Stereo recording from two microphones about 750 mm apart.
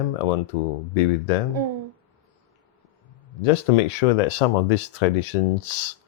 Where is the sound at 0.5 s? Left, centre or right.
Left.